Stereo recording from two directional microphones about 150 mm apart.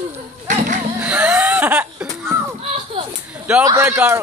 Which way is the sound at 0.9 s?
10° right (ahead or behind).